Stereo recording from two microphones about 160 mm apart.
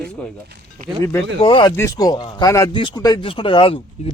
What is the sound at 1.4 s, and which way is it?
Speech, 30° left (ahead or behind).